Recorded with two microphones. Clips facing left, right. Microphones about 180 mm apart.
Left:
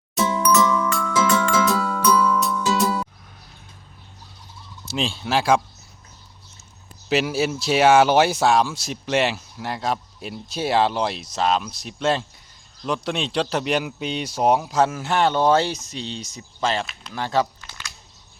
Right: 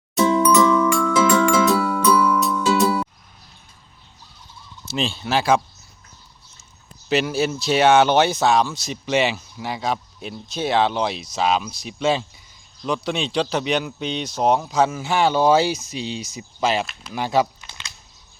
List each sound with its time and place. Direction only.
0.5 s music: centre (ahead or behind)
1.1 s music: 10° right (ahead or behind)
4.9 s speech: centre (ahead or behind)
7.1 s speech: 5° left (ahead or behind); by 17.9 s 20° right (ahead or behind)